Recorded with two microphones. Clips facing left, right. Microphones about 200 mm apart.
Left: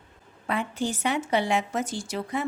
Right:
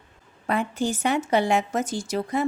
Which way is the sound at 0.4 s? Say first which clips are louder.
Right 3 dB; 45° right (ahead or behind).